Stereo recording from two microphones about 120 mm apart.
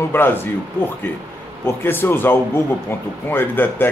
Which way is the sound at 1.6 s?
20° left (ahead or behind).